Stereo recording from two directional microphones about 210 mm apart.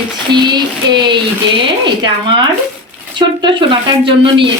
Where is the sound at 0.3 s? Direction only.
20° right (ahead or behind).